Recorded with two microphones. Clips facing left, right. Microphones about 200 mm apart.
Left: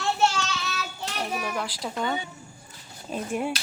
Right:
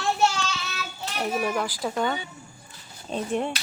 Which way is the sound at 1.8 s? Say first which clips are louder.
Right 2 dB; centre (ahead or behind).